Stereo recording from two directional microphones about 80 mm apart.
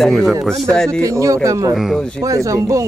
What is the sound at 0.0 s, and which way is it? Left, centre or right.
Speech, centre.